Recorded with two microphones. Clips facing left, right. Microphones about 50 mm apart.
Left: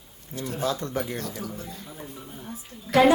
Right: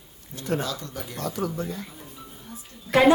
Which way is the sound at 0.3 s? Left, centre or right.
Right.